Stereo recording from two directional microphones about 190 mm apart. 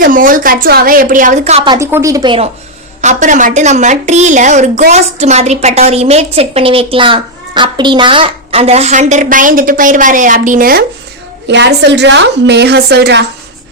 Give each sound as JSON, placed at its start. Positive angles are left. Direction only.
{"t": 0.0, "sound": "a woman's voice", "side_deg": -45}
{"t": 1.7, "sound": "a woman's voice", "side_deg": -15}
{"t": 3.0, "sound": "a woman's voice", "side_deg": -40}
{"t": 11.4, "sound": "a woman's voice", "side_deg": -65}